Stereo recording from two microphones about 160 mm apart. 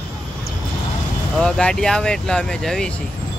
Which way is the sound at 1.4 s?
5° left (ahead or behind).